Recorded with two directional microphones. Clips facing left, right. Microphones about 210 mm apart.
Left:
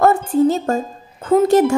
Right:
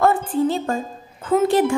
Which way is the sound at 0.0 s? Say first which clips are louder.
Left 4 dB; 40° left (ahead or behind).